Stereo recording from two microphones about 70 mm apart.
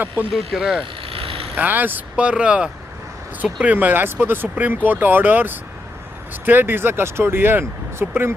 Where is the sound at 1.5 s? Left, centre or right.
Right.